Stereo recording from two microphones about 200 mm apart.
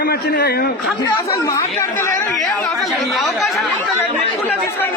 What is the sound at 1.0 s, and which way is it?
Speech, 15° left (ahead or behind).